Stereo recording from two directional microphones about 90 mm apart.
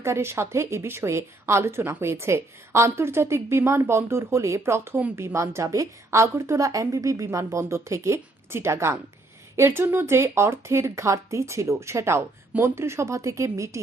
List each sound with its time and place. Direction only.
0.0 s speech: 30° right (ahead or behind)